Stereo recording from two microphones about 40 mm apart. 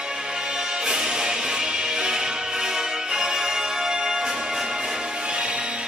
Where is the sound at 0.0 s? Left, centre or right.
Centre.